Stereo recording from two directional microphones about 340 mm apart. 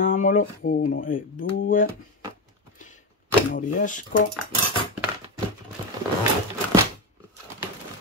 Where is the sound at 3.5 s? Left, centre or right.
Left.